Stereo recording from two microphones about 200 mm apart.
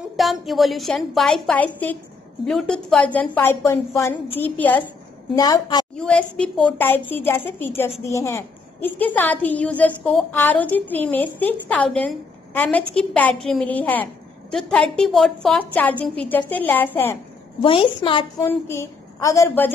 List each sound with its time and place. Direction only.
0.1 s a woman's voice: centre (ahead or behind)
5.3 s a woman's voice: 20° left (ahead or behind)
5.9 s a woman's voice: 5° left (ahead or behind)
17.6 s a woman's voice: 25° left (ahead or behind)
18.4 s a woman's voice: 10° left (ahead or behind)